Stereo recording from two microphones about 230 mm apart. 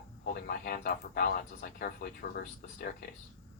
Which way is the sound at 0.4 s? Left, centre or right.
Left.